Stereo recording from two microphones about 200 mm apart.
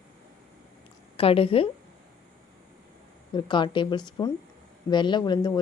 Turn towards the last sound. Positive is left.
turn(degrees=20)  # may be behind; listen again after turning